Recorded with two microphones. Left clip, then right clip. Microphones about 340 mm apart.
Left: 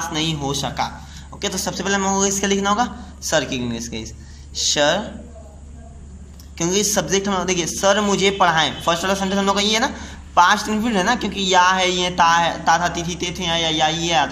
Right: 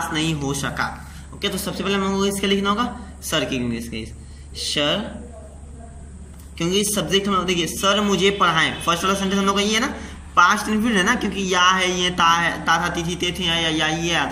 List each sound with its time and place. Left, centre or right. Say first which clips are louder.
0.1 s speech: left 1 dB; centre
6.6 s speech: left 2 dB; centre